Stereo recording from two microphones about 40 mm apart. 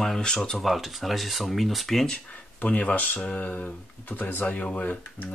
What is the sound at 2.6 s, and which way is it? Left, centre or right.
Speech, left.